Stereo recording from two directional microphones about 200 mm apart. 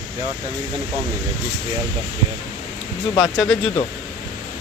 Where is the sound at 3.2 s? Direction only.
Centre (ahead or behind).